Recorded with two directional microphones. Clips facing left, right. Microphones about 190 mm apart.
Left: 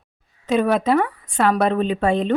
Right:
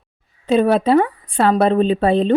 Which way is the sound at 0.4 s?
30° right (ahead or behind).